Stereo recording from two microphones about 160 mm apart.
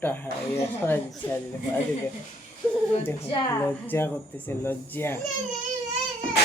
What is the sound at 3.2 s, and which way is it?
Speech, 30° left (ahead or behind).